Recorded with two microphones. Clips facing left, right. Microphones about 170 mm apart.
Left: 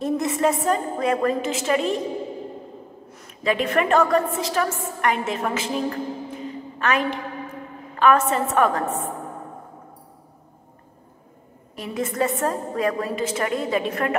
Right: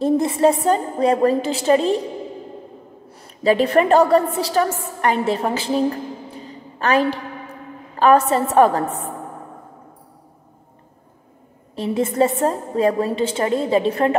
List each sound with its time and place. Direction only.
0.0 s a woman's voice: 30° right (ahead or behind)
3.1 s a woman's voice: 35° right (ahead or behind)
11.7 s a woman's voice: 30° right (ahead or behind)